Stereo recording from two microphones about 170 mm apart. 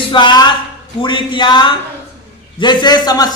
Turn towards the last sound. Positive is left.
turn(degrees=25)  # may be behind; listen again after turning